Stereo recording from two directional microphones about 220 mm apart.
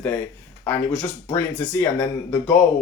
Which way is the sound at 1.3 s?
10° left (ahead or behind).